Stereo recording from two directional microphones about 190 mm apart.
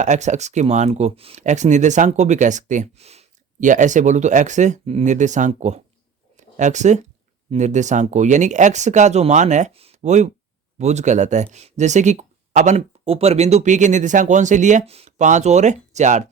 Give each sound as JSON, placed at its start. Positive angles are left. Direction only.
{"t": 0.0, "sound": "speech", "side_deg": -40}
{"t": 6.3, "sound": "a sound", "side_deg": -40}
{"t": 7.5, "sound": "speech", "side_deg": -40}